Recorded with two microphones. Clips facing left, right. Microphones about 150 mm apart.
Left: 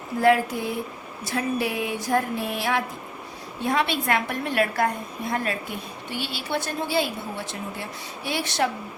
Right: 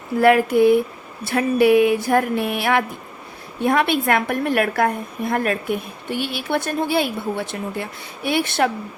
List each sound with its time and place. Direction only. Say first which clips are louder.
0.2 s a woman's voice: right 6 dB; 65° right (ahead or behind)